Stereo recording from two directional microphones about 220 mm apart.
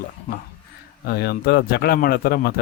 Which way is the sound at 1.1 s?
45° left (ahead or behind).